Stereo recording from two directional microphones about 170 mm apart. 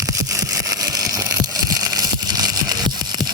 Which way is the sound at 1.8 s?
20° right (ahead or behind).